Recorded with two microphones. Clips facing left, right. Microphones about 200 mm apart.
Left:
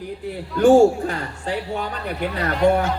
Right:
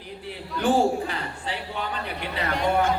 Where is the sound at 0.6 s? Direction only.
45° left (ahead or behind).